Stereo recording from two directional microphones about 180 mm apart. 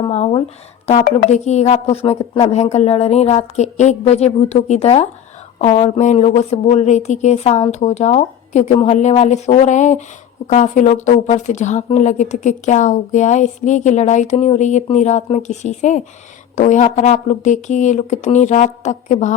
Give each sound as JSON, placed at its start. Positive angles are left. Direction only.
{"t": 0.1, "sound": "speech", "side_deg": 35}